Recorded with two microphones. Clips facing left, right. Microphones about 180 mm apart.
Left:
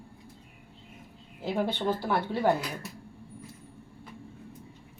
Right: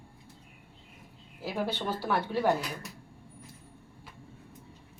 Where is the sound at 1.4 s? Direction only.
20° left (ahead or behind).